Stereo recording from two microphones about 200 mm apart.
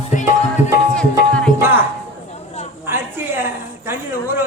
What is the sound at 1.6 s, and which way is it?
Music, 10° right (ahead or behind).